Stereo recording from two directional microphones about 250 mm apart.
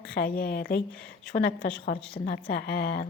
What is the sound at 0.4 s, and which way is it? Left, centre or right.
Speech, left.